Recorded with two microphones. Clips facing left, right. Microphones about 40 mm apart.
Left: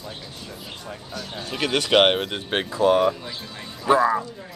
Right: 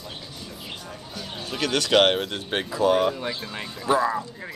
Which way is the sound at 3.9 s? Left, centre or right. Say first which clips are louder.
Left 3 dB; centre.